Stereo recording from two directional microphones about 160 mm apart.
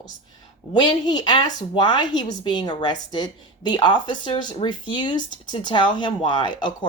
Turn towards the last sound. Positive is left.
turn(degrees=30)  # may be behind; listen again after turning